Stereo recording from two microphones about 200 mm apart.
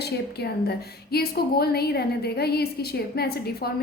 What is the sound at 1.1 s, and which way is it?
A woman's voice, 50° left (ahead or behind).